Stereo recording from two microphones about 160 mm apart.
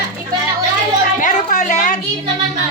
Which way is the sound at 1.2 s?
50° left (ahead or behind).